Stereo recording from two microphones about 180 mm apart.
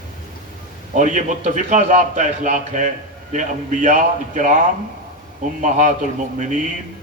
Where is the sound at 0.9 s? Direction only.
45° right (ahead or behind).